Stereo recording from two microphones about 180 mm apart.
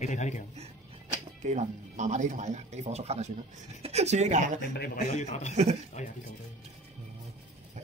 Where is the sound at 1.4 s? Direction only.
40° right (ahead or behind).